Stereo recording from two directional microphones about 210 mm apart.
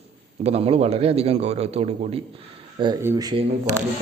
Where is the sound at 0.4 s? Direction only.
30° right (ahead or behind).